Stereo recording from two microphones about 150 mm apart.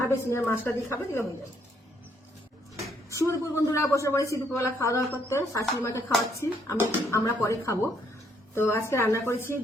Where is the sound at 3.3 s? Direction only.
20° left (ahead or behind).